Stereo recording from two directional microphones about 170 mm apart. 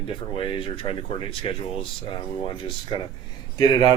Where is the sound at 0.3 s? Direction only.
30° left (ahead or behind).